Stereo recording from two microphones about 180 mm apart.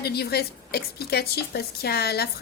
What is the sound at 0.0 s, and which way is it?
Speech, 60° left (ahead or behind).